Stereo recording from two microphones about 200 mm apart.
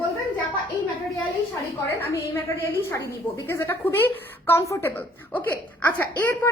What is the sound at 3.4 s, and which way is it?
A woman's voice, 15° left (ahead or behind).